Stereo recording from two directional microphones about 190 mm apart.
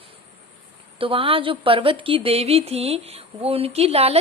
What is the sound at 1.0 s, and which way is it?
A woman's voice, 30° right (ahead or behind).